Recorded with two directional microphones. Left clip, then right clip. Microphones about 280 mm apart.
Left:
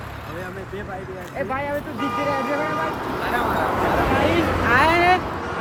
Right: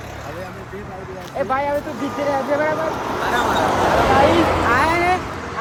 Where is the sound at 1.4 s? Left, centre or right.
Centre.